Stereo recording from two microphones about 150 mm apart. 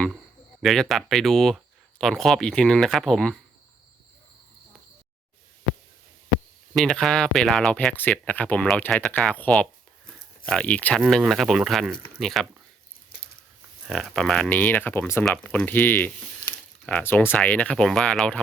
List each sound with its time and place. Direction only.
0.6 s speech: centre (ahead or behind)
6.7 s speech: 5° left (ahead or behind)
11.0 s speech: centre (ahead or behind)
13.8 s speech: centre (ahead or behind); by 15.2 s 15° left (ahead or behind)
15.2 s speech: 5° left (ahead or behind)